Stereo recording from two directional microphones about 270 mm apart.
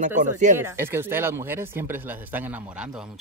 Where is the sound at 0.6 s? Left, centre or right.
Centre.